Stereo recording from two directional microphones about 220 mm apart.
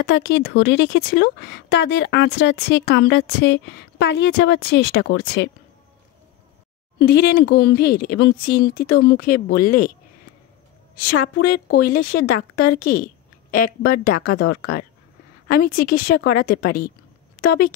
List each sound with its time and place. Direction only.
0.0 s speech: 50° left (ahead or behind)
7.0 s speech: 45° left (ahead or behind)
11.3 s speech: 45° left (ahead or behind)